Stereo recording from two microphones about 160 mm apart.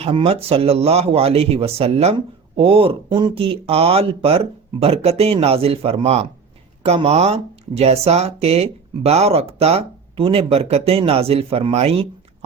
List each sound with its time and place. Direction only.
0.0 s speech: 35° right (ahead or behind)